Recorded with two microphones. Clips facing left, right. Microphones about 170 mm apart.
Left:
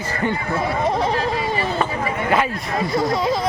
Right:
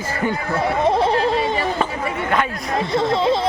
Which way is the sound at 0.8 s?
30° right (ahead or behind).